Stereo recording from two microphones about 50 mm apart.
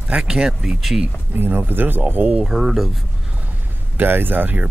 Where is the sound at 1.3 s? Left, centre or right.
Right.